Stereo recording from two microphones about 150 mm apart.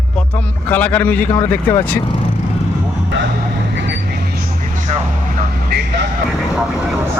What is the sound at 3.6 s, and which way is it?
Vehicle, 90° right.